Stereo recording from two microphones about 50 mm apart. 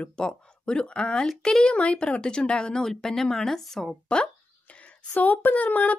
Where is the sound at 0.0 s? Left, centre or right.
Centre.